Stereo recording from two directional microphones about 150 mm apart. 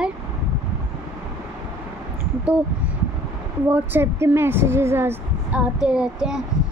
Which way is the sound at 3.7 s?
15° right (ahead or behind).